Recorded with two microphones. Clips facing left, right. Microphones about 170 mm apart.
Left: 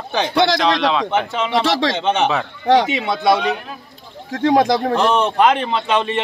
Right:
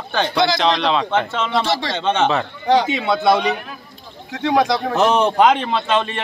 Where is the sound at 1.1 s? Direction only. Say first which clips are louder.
Left 1 dB; 15° left (ahead or behind).